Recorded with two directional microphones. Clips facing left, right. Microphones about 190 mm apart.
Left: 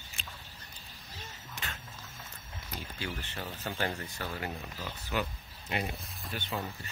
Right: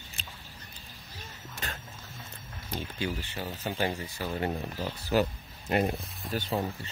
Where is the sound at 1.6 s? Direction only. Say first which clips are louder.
Right 4 dB; 40° right (ahead or behind).